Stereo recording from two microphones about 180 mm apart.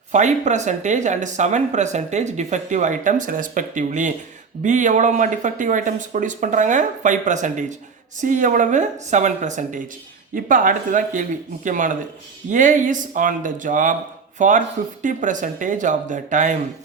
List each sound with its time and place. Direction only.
0.1 s speech: 40° right (ahead or behind)